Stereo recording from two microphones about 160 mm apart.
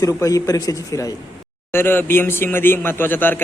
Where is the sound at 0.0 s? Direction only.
20° left (ahead or behind).